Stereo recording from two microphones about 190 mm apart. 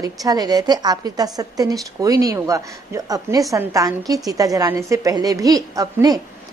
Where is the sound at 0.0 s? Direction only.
20° right (ahead or behind).